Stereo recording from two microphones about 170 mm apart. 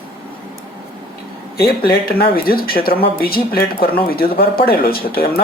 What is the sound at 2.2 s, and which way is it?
Speech, 60° left (ahead or behind).